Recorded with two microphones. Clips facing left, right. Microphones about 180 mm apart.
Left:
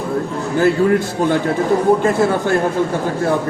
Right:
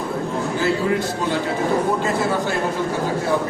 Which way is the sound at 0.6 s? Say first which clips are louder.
Left 8 dB; 50° left (ahead or behind).